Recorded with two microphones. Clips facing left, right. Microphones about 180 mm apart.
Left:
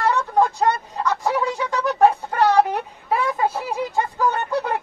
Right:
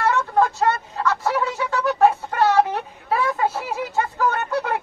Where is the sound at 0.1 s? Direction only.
15° left (ahead or behind).